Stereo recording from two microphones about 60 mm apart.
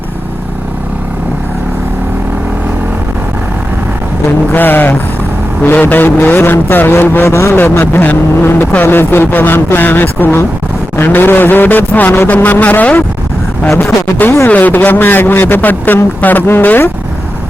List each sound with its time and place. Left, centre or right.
4.5 s a man's voice: left
13.7 s a man's voice: left